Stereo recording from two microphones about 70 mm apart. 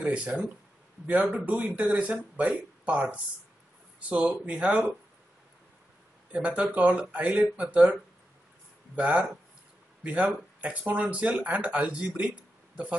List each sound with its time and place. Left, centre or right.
0.0 s speech: centre
4.2 s speech: centre
6.3 s speech: centre